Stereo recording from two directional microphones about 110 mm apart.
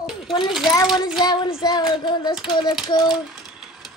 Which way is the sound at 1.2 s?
40° left (ahead or behind).